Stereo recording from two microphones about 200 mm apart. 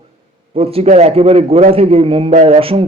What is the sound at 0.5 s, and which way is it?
A man's voice, 30° right (ahead or behind).